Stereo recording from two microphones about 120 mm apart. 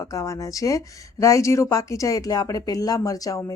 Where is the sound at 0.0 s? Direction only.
25° left (ahead or behind).